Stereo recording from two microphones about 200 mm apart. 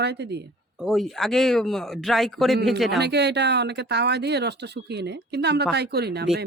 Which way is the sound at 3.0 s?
55° right (ahead or behind).